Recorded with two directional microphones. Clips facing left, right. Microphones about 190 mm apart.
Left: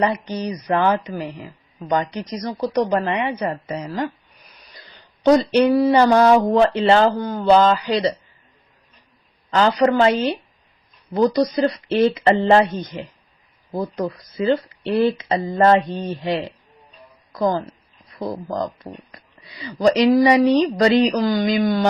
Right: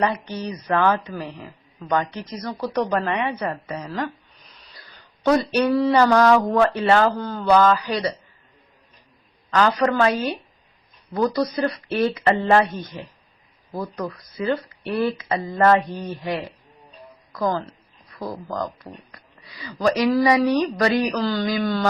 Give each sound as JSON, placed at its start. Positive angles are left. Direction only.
{"t": 0.0, "sound": "speech", "side_deg": 15}
{"t": 5.2, "sound": "speech", "side_deg": 20}
{"t": 9.5, "sound": "speech", "side_deg": 25}